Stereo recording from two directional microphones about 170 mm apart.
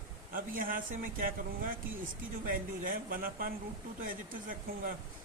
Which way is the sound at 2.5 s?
55° right (ahead or behind).